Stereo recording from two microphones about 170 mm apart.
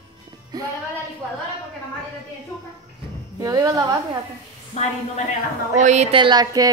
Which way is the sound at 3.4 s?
20° right (ahead or behind).